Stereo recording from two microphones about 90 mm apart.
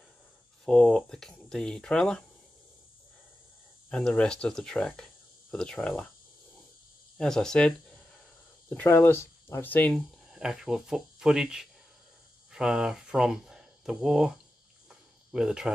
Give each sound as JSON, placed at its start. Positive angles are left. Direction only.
{"t": 0.7, "sound": "speech", "side_deg": 5}
{"t": 3.9, "sound": "speech", "side_deg": 10}
{"t": 7.2, "sound": "speech", "side_deg": 5}
{"t": 8.6, "sound": "speech", "side_deg": 25}
{"t": 10.3, "sound": "speech", "side_deg": -5}
{"t": 14.9, "sound": "cricket", "side_deg": -5}